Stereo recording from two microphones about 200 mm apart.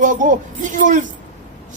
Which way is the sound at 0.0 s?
40° right (ahead or behind).